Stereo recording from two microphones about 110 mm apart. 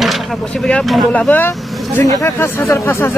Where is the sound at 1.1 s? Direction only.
15° left (ahead or behind).